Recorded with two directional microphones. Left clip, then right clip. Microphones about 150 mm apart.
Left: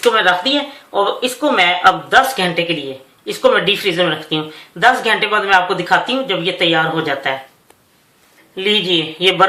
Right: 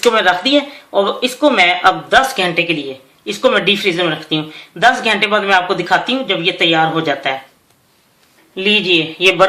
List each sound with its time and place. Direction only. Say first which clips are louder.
0.0 s speech: right 1 dB; 50° right (ahead or behind)
8.5 s speech: right 2 dB; 50° right (ahead or behind)